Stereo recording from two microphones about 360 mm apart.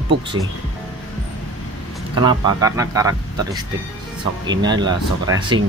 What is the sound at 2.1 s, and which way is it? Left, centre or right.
Speech, centre.